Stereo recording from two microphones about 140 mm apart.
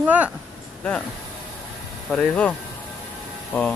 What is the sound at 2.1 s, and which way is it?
Speech, 10° left (ahead or behind).